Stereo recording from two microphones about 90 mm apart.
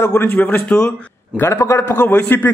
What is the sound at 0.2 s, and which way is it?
A man's voice, 20° left (ahead or behind).